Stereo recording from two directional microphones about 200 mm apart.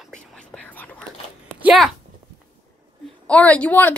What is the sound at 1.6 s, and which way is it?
Speech, centre (ahead or behind).